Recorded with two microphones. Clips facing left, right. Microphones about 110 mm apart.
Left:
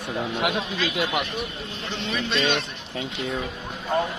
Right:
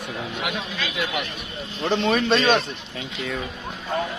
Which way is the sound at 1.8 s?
55° right (ahead or behind).